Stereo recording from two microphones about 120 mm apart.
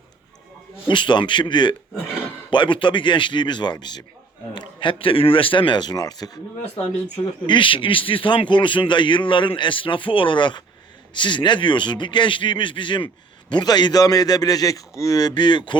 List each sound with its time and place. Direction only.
0.9 s a man's voice: 40° left (ahead or behind)
7.4 s a man's voice: 40° left (ahead or behind)